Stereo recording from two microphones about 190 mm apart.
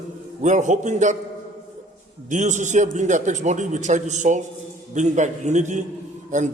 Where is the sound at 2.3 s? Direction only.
40° right (ahead or behind).